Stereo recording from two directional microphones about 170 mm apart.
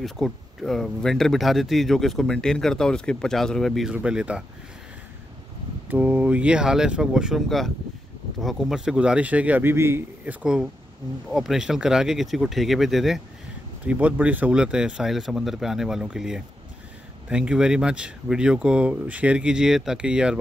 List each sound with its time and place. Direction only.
0.0 s speech: centre (ahead or behind)
5.9 s speech: 10° right (ahead or behind)